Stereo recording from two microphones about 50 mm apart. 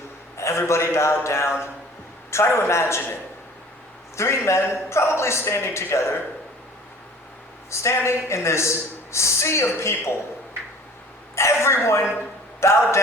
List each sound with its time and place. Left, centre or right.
0.3 s a man's voice: left
4.2 s a man's voice: left
7.7 s speech: left
11.3 s a man's voice: left